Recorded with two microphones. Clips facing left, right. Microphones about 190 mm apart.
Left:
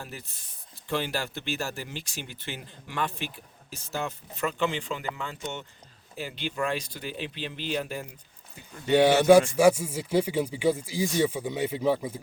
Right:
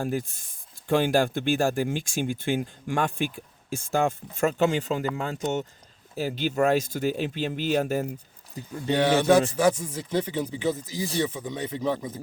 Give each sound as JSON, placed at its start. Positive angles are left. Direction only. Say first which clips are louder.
{"t": 0.0, "sound": "speech", "louder": "right 13 dB", "side_deg": -50}
{"t": 8.9, "sound": "speech", "louder": "left 2 dB", "side_deg": 10}